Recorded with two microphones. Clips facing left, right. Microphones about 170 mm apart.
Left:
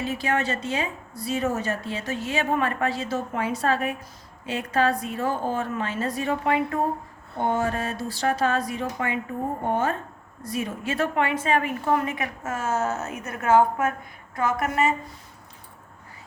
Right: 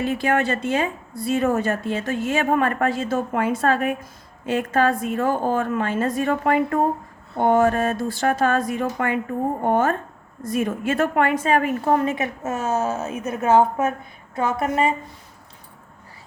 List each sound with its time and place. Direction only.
0.0 s a woman's voice: 55° right (ahead or behind); by 14.9 s 25° right (ahead or behind)